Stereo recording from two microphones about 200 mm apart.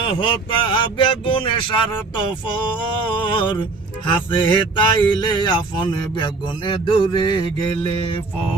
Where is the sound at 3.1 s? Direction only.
25° left (ahead or behind).